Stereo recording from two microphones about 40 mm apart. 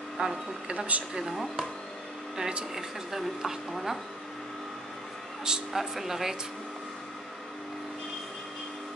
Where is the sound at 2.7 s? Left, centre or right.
Centre.